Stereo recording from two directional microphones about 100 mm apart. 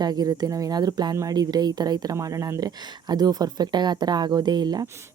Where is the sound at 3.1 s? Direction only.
40° right (ahead or behind).